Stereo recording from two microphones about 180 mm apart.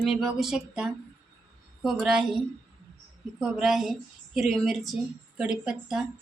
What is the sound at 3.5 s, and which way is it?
A woman's voice, 5° right (ahead or behind).